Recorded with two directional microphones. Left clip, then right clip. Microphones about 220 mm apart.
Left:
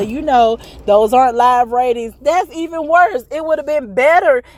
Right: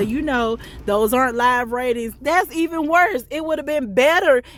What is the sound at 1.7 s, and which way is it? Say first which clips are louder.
Speech: left 8 dB; 25° right (ahead or behind).